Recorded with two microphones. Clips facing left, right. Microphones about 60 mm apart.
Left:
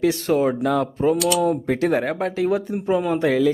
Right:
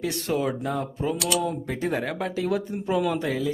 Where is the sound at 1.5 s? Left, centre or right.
Left.